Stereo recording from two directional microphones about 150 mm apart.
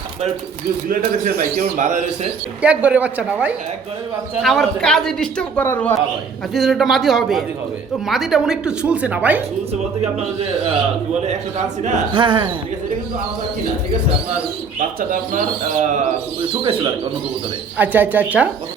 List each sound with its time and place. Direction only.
1.5 s speech: 55° right (ahead or behind)
2.6 s speech: 10° right (ahead or behind)
4.4 s a man's voice: centre (ahead or behind)
6.5 s a man's voice: centre (ahead or behind)
11.2 s speech: 45° right (ahead or behind)
12.1 s speech: 30° right (ahead or behind)
14.8 s speech: 60° right (ahead or behind)
17.7 s speech: 10° right (ahead or behind)